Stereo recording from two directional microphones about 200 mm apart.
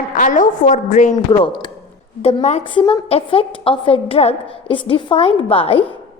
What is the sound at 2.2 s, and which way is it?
A woman's voice, 30° left (ahead or behind).